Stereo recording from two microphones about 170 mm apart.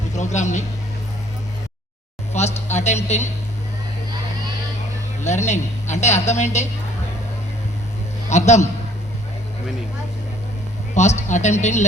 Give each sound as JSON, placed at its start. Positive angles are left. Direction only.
{"t": 0.2, "sound": "a woman's voice", "side_deg": 45}
{"t": 2.3, "sound": "a sound", "side_deg": 40}
{"t": 5.2, "sound": "a woman's voice", "side_deg": 40}
{"t": 8.3, "sound": "a woman's voice", "side_deg": 45}
{"t": 10.9, "sound": "a woman's voice", "side_deg": 45}